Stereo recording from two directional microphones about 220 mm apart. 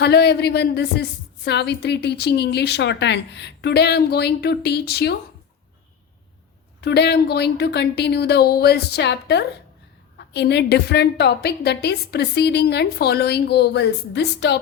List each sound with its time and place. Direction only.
0.0 s a woman's voice: 50° left (ahead or behind)
6.8 s a woman's voice: 50° left (ahead or behind)